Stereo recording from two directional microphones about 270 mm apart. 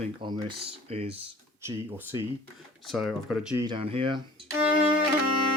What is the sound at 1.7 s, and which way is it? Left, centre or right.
Speech, centre.